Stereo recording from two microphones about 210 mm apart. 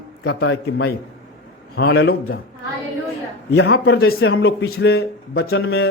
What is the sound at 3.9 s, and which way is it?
Speech, 50° left (ahead or behind).